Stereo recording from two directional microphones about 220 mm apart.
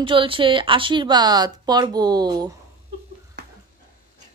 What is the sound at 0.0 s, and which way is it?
Speech, 25° right (ahead or behind).